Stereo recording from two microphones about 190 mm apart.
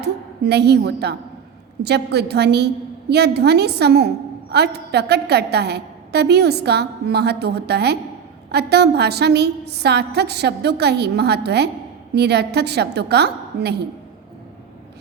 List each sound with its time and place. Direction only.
0.0 s a woman's voice: 60° right (ahead or behind)